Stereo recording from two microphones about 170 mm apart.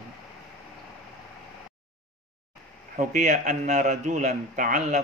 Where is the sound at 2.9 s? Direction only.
45° right (ahead or behind).